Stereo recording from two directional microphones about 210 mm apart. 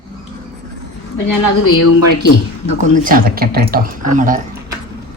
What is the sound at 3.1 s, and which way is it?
Speech, 45° right (ahead or behind).